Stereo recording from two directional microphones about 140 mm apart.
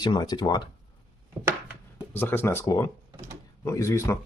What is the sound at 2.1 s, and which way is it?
Speech, 15° left (ahead or behind).